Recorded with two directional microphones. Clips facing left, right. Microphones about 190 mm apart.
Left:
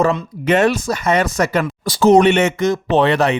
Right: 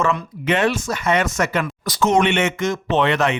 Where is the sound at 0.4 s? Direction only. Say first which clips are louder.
Left 5 dB; 40° left (ahead or behind).